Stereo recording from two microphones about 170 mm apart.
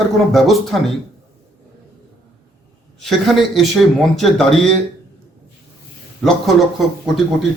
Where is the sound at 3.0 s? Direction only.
Centre (ahead or behind).